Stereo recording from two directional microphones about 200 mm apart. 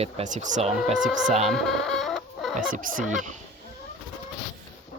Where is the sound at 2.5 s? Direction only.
40° right (ahead or behind).